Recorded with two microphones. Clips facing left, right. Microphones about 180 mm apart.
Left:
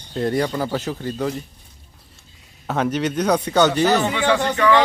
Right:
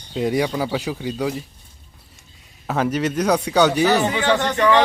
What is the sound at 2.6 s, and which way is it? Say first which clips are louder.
Speech: even; 5° right (ahead or behind).